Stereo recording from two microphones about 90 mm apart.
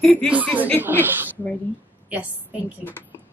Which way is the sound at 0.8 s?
25° right (ahead or behind).